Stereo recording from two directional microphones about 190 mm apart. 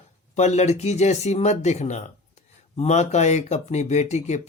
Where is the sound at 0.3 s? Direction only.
35° left (ahead or behind).